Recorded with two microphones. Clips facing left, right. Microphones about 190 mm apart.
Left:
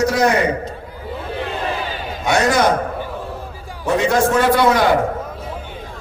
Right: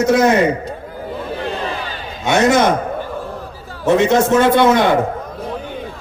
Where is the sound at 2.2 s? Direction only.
25° right (ahead or behind).